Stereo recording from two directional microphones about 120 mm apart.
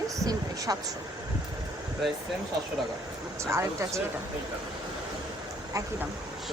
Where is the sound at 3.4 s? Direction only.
25° right (ahead or behind).